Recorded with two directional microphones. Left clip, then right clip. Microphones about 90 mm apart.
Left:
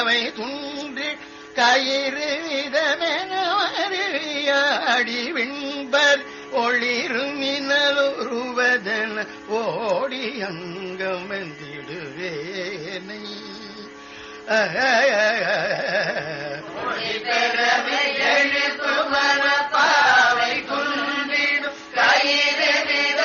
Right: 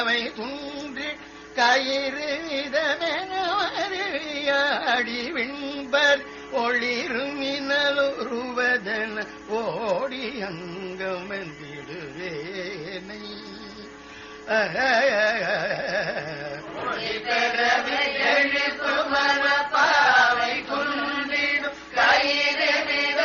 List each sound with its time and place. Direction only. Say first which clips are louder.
0.0 s music: left 4 dB; 35° right (ahead or behind)
6.7 s music: left 3 dB; 25° right (ahead or behind)
11.0 s carnatic music: left 4 dB; 35° right (ahead or behind)
14.4 s carnatic music: left 3 dB; 30° right (ahead or behind)
16.4 s chant: left 3 dB; 35° right (ahead or behind)